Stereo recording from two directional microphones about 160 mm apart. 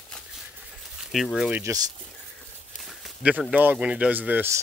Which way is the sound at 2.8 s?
5° right (ahead or behind).